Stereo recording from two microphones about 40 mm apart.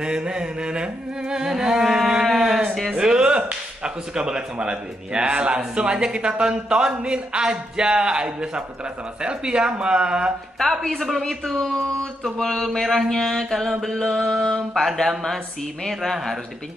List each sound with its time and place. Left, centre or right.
0.0 s speech: right
2.4 s sheep: centre
3.0 s music: centre
3.3 s speech: right
11.0 s speech: centre
11.4 s mantra: centre
11.7 s mantra: centre
12.7 s speech: centre
13.1 s mantra: centre
14.5 s speech: centre